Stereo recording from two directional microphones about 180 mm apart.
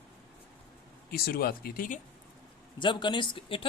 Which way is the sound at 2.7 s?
25° left (ahead or behind).